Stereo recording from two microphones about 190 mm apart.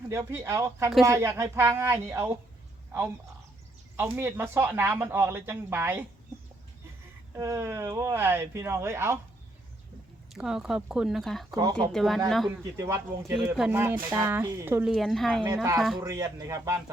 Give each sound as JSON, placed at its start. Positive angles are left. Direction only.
{"t": 0.1, "sound": "speech", "side_deg": -15}
{"t": 3.9, "sound": "speech", "side_deg": -10}
{"t": 7.3, "sound": "speech", "side_deg": -15}
{"t": 10.3, "sound": "speech", "side_deg": -5}
{"t": 11.5, "sound": "speech", "side_deg": -20}
{"t": 11.9, "sound": "speech", "side_deg": 0}
{"t": 12.7, "sound": "speech", "side_deg": -15}
{"t": 14.9, "sound": "speech", "side_deg": 0}
{"t": 16.0, "sound": "speech", "side_deg": -20}